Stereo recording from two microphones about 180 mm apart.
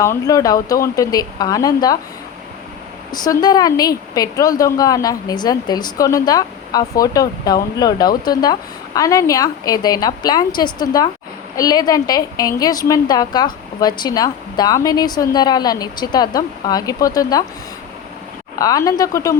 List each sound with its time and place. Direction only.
0.0 s a woman's voice: 15° left (ahead or behind)
3.1 s a woman's voice: 20° left (ahead or behind)
18.6 s speech: 20° left (ahead or behind)